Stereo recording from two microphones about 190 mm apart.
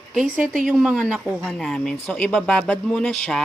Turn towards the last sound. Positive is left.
turn(degrees=5)  # may be behind; listen again after turning